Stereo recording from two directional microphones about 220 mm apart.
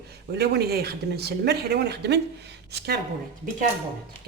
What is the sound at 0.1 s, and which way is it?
Speech, 50° right (ahead or behind).